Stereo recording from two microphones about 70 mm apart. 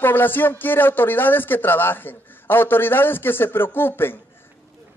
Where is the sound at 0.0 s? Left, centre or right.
Left.